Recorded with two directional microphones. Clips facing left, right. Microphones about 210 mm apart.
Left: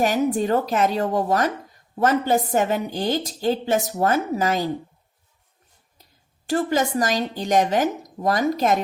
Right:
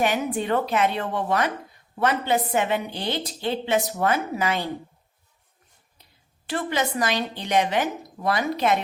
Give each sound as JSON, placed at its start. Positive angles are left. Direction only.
{"t": 0.0, "sound": "a woman's voice", "side_deg": 40}
{"t": 6.5, "sound": "a woman's voice", "side_deg": 40}